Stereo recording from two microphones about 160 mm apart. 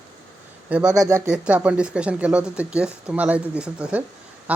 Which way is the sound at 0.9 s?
15° right (ahead or behind).